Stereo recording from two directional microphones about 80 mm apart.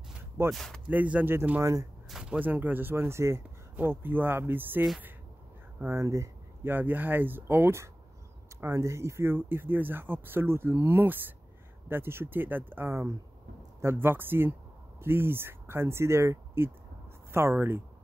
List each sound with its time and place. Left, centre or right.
0.5 s speech: centre
0.8 s speech: centre
1.6 s speech: right
2.0 s a sound: centre
2.3 s speech: right
5.9 s speech: right
6.6 s speech: right